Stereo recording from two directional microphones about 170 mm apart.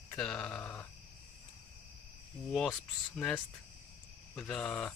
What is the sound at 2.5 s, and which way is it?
Speech, 5° left (ahead or behind).